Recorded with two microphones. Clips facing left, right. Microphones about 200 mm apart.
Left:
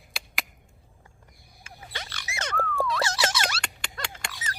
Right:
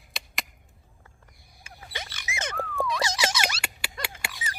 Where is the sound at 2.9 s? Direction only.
15° right (ahead or behind).